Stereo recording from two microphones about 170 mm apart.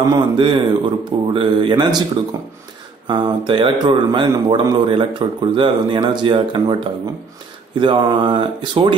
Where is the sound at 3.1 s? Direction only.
30° right (ahead or behind).